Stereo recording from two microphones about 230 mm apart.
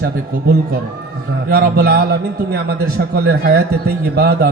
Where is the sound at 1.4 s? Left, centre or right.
Right.